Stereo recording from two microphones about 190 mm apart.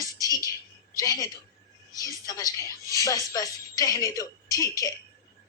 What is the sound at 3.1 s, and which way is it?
Music, 20° left (ahead or behind).